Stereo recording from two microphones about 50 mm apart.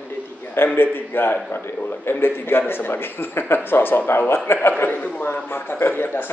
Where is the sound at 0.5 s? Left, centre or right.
Left.